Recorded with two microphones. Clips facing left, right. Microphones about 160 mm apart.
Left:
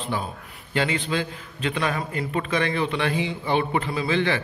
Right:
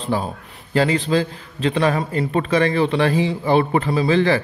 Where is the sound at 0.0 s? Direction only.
35° right (ahead or behind).